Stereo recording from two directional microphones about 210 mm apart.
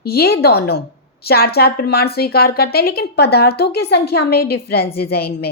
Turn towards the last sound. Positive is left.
turn(degrees=50)  # may be behind; listen again after turning